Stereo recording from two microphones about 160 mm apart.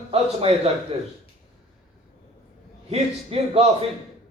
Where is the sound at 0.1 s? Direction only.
40° right (ahead or behind).